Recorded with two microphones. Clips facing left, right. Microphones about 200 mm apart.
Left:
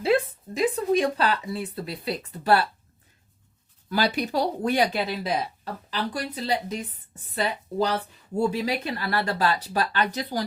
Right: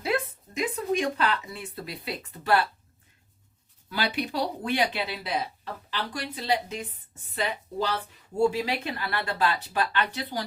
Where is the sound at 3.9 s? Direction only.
40° left (ahead or behind).